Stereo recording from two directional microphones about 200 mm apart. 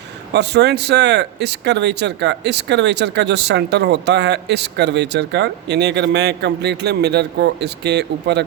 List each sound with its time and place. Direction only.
0.3 s speech: 55° right (ahead or behind)